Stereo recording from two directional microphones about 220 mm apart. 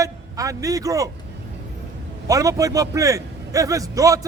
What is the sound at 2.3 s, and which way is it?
A man's voice, 15° right (ahead or behind).